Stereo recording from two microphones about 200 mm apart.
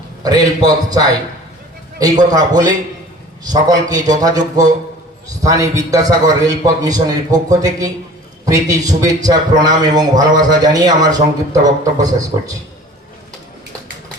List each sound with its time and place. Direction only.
0.2 s a man's voice: 20° right (ahead or behind)